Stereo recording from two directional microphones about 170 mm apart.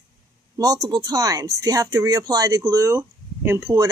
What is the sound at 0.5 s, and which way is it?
Speech, 20° right (ahead or behind).